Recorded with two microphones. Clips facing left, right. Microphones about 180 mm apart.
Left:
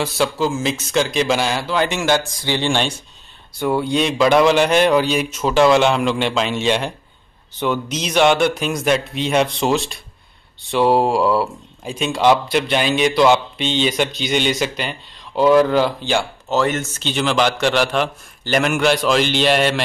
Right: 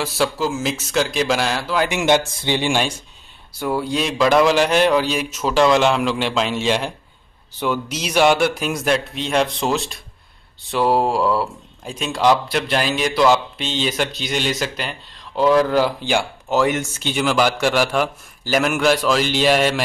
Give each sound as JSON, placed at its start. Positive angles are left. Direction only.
{"t": 0.0, "sound": "speech", "side_deg": -5}
{"t": 2.0, "sound": "speech", "side_deg": -20}